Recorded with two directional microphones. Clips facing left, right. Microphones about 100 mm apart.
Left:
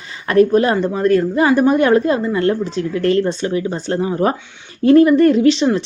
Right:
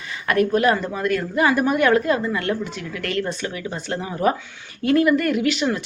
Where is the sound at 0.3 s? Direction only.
30° left (ahead or behind).